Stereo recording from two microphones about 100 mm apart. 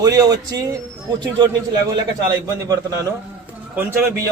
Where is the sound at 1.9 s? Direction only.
35° right (ahead or behind).